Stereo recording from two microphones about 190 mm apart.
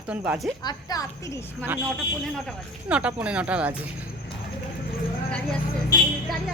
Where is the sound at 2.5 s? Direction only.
5° right (ahead or behind).